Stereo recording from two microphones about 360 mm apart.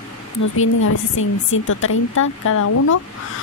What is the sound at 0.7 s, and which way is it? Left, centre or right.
Speech, left.